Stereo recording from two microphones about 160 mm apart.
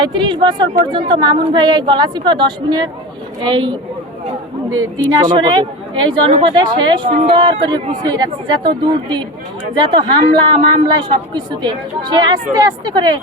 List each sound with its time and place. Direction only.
0.0 s speech: 30° right (ahead or behind)
7.1 s speech: 45° right (ahead or behind)
7.3 s speech: 30° right (ahead or behind)